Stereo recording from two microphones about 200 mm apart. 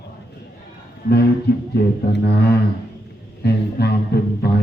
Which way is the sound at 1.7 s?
55° left (ahead or behind).